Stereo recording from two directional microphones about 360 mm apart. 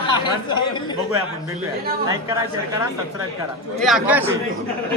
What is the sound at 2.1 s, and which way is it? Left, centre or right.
Speech, centre.